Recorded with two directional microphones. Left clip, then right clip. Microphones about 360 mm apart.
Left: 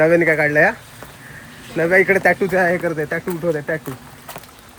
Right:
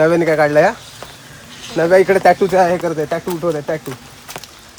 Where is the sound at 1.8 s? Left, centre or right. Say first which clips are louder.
Right 3 dB; centre.